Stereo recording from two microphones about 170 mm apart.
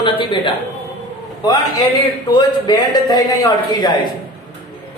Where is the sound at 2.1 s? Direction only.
30° left (ahead or behind).